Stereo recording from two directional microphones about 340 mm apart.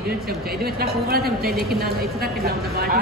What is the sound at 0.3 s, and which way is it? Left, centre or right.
Speech, right.